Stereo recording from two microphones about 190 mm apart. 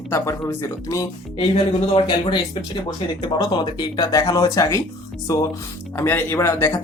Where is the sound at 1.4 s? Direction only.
30° left (ahead or behind); by 6.7 s 15° left (ahead or behind).